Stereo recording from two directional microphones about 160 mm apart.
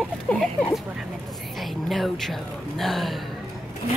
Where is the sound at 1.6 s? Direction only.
Centre (ahead or behind).